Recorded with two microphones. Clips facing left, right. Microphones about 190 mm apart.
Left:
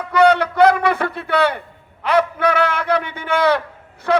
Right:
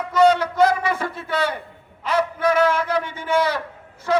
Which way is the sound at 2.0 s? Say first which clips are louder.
Left 3 dB; 65° left (ahead or behind).